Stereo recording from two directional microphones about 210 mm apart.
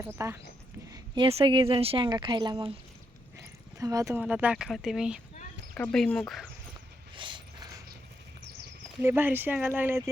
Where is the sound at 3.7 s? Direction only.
15° right (ahead or behind); by 6.5 s centre (ahead or behind).